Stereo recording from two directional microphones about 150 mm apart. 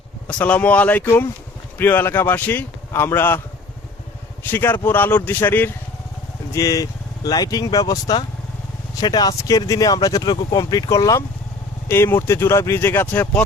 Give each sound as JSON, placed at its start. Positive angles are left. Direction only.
{"t": 0.3, "sound": "speech", "side_deg": 10}
{"t": 4.4, "sound": "speech", "side_deg": 15}